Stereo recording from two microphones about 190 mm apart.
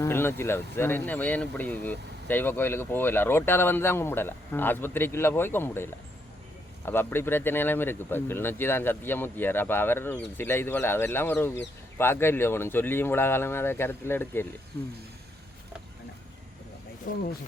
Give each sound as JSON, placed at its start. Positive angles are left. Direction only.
{"t": 0.0, "sound": "speech", "side_deg": 10}
{"t": 17.1, "sound": "speech", "side_deg": 45}